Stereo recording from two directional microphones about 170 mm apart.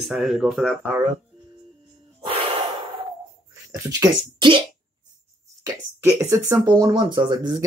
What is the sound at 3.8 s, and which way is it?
Speech, 25° right (ahead or behind).